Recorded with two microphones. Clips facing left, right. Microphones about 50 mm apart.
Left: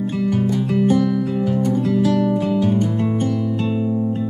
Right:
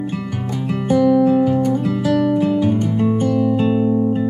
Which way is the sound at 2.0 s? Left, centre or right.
Centre.